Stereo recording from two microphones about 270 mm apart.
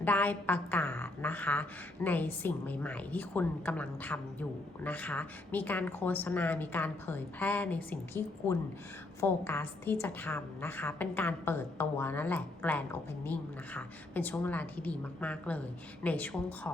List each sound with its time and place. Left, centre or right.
0.0 s a woman's voice: centre